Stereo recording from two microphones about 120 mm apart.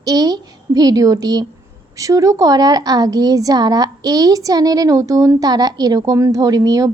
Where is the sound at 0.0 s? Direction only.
30° right (ahead or behind).